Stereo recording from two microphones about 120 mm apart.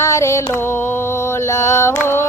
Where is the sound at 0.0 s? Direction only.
25° left (ahead or behind).